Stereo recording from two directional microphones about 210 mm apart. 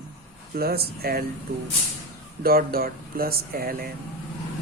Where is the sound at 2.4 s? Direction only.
45° right (ahead or behind).